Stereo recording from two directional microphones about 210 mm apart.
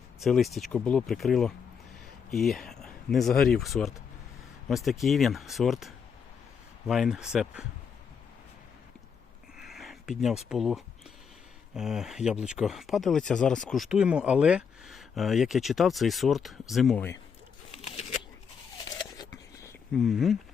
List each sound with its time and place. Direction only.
0.2 s speech: centre (ahead or behind)
9.7 s speech: centre (ahead or behind)
17.8 s a sound: 30° left (ahead or behind)
19.9 s speech: centre (ahead or behind)